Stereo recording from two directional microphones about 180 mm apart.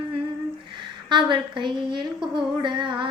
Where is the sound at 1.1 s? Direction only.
25° right (ahead or behind).